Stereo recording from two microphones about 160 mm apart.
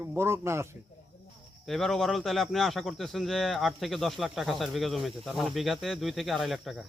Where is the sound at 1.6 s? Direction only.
Centre (ahead or behind).